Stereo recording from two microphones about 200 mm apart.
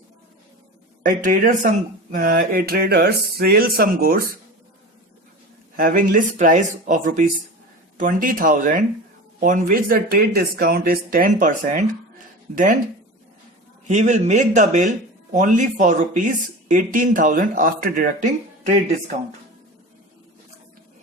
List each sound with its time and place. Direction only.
1.0 s speech: 40° right (ahead or behind)
5.7 s speech: 45° right (ahead or behind)
13.8 s speech: 35° right (ahead or behind)